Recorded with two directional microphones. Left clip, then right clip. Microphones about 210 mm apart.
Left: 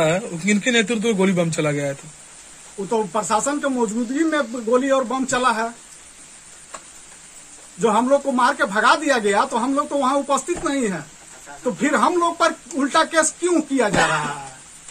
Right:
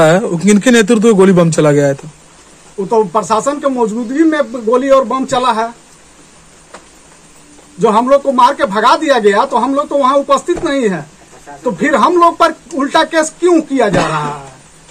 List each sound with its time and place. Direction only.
0.0 s a man's voice: 35° right (ahead or behind)
2.9 s a man's voice: centre (ahead or behind)
7.8 s a man's voice: centre (ahead or behind)